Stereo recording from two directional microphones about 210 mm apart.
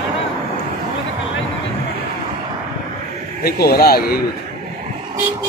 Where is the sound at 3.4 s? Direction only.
45° left (ahead or behind).